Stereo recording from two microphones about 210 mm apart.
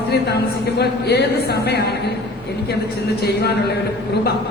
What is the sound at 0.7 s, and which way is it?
A man's voice, 50° left (ahead or behind).